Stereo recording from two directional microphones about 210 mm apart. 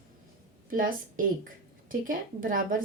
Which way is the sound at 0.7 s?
40° right (ahead or behind).